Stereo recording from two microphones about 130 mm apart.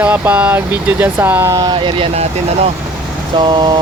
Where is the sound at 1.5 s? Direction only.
35° right (ahead or behind).